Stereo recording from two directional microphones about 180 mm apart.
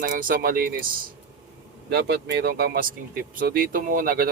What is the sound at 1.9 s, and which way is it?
Speech, 65° right (ahead or behind).